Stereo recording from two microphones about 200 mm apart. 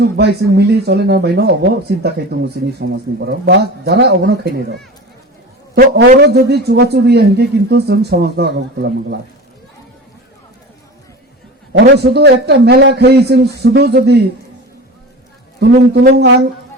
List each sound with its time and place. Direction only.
0.2 s a man's voice: 55° right (ahead or behind)
5.7 s a man's voice: 55° right (ahead or behind)
11.7 s a man's voice: 55° right (ahead or behind)
15.6 s a man's voice: 55° right (ahead or behind)